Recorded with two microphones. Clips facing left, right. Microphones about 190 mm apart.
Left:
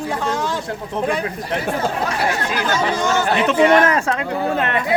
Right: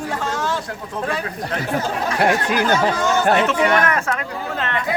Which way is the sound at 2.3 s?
55° right (ahead or behind).